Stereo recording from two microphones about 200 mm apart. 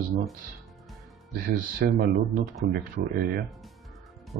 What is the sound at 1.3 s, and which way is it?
Speech, 45° right (ahead or behind).